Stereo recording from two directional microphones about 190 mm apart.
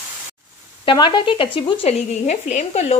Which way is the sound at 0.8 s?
25° left (ahead or behind).